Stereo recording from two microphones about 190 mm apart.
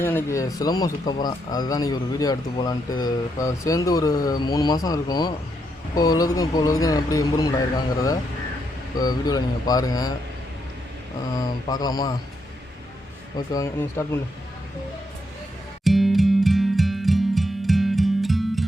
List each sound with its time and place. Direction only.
0.0 s speech: 10° left (ahead or behind)
9.0 s speech: 20° left (ahead or behind)
11.3 s speech: 20° left (ahead or behind)
13.3 s speech: 20° left (ahead or behind)
15.8 s music: centre (ahead or behind)